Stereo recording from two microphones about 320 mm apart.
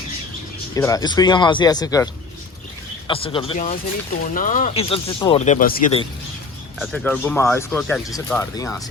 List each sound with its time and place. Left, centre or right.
0.8 s speech: centre
3.1 s speech: centre
6.7 s speech: centre